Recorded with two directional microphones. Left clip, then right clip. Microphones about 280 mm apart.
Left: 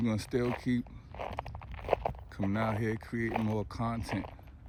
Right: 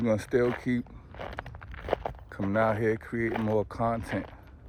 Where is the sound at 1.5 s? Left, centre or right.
Right.